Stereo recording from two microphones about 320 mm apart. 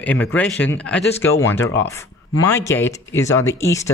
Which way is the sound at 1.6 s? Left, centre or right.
Left.